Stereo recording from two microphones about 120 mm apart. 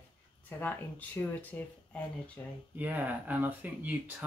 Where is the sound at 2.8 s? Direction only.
15° right (ahead or behind).